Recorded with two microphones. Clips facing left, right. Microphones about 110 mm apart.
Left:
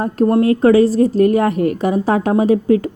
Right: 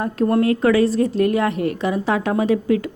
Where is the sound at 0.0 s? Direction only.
30° left (ahead or behind).